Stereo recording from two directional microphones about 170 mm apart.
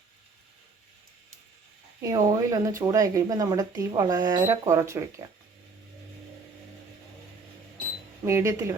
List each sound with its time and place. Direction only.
2.0 s speech: 20° right (ahead or behind)
8.2 s speech: 15° right (ahead or behind)